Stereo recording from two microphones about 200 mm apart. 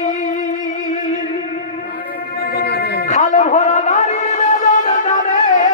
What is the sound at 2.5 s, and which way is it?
Music, 55° left (ahead or behind).